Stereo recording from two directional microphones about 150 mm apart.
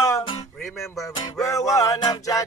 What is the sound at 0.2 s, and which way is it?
Music, 30° left (ahead or behind).